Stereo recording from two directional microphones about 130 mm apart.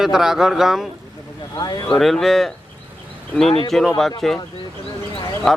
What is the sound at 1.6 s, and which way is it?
Speech, 30° left (ahead or behind).